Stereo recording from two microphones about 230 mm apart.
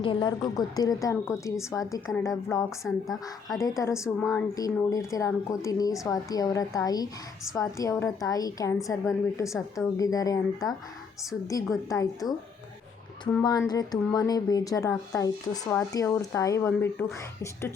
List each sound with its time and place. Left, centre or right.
0.0 s speech: left
2.6 s speech: centre
3.6 s speech: centre
13.4 s speech: centre